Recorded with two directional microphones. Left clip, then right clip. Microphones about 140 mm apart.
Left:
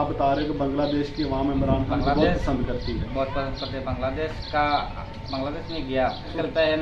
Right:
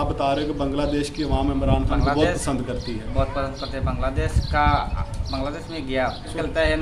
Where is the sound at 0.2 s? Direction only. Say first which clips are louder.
Right 1 dB; 35° right (ahead or behind).